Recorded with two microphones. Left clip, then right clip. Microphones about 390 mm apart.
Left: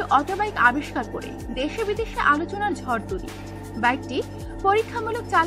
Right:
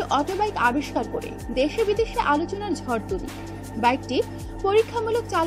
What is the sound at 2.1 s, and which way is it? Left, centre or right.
Speech, centre.